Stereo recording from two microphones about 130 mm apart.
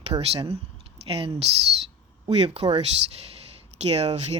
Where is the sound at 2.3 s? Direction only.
50° right (ahead or behind).